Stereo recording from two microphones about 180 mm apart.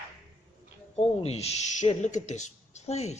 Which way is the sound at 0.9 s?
35° left (ahead or behind).